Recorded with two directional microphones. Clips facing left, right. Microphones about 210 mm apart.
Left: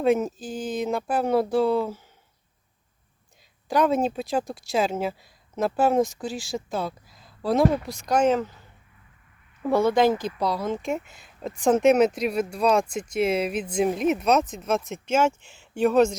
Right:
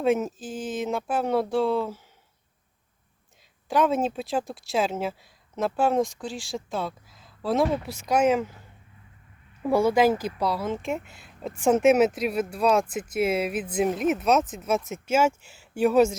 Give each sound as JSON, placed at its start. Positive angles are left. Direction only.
{"t": 0.0, "sound": "speech", "side_deg": 0}
{"t": 3.7, "sound": "speech", "side_deg": 0}
{"t": 9.6, "sound": "speech", "side_deg": -10}
{"t": 10.9, "sound": "speech", "side_deg": 40}
{"t": 11.2, "sound": "speech", "side_deg": -5}